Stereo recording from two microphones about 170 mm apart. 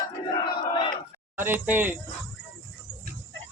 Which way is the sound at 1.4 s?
10° right (ahead or behind).